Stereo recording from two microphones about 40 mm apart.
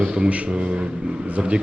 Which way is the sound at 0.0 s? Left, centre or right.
Right.